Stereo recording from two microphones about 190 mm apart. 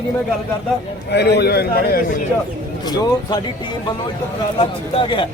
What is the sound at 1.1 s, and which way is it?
Speech, 60° left (ahead or behind).